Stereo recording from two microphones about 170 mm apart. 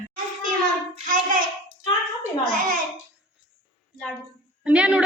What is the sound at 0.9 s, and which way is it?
Child singing, 50° right (ahead or behind).